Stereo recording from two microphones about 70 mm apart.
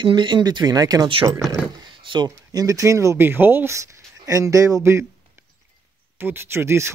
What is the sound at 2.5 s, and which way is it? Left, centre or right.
Speech, right.